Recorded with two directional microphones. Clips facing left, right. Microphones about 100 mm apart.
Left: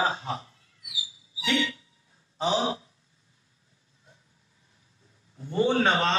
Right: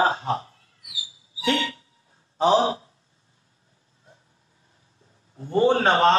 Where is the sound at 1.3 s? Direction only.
45° right (ahead or behind).